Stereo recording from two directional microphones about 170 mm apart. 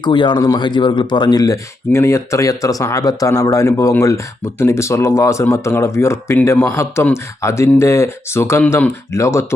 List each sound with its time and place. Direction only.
0.0 s speech: 25° left (ahead or behind)